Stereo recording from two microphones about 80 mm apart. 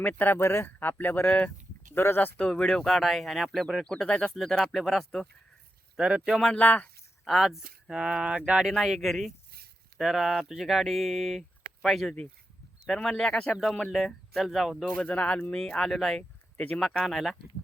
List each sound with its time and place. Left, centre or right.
0.0 s speech: left
2.0 s speech: left
2.4 s speech: centre
6.0 s speech: centre
6.6 s speech: left
7.3 s speech: centre
8.7 s speech: centre
15.0 s speech: centre